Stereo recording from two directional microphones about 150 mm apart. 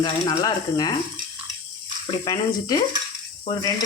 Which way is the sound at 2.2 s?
25° left (ahead or behind).